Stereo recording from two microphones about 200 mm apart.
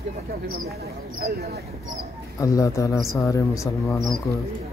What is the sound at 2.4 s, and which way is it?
Speech, 15° left (ahead or behind).